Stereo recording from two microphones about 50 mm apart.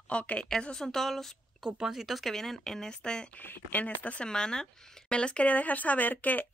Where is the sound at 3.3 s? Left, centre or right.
Left.